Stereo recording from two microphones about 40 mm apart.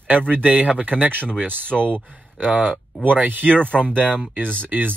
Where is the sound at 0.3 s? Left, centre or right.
Right.